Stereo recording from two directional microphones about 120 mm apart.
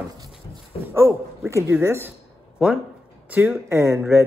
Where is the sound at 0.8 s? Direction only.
20° right (ahead or behind).